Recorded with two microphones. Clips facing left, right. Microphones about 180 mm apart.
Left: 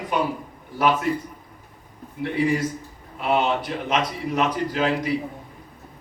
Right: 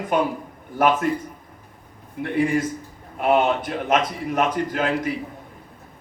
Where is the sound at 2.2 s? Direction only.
50° right (ahead or behind).